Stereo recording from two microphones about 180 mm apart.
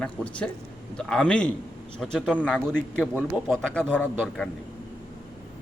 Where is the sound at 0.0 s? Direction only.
5° left (ahead or behind).